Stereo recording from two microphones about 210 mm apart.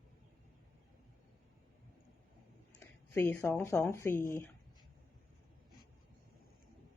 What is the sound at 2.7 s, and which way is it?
Speech, 10° left (ahead or behind).